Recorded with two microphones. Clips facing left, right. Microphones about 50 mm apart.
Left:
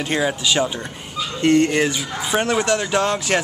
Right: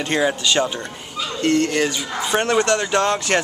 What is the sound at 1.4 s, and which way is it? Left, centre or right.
Speech, left.